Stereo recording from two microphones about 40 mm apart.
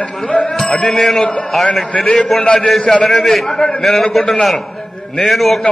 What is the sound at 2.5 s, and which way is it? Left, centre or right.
A man's voice, centre.